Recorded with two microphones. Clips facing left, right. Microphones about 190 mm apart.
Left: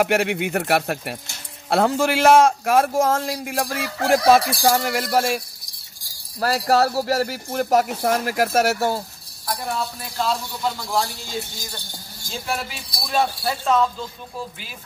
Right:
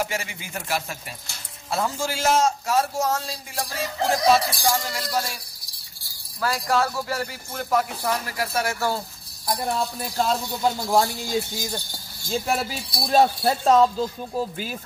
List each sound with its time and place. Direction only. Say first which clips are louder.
0.0 s a sound: left 10 dB; 65° left (ahead or behind)
6.4 s speech: left 5 dB; 40° left (ahead or behind)
8.3 s speech: left 7 dB; 80° left
10.1 s speech: even; 45° right (ahead or behind)
12.4 s speech: right 3 dB; 40° right (ahead or behind)